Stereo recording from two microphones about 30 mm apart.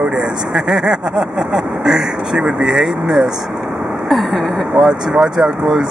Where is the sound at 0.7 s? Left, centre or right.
Centre.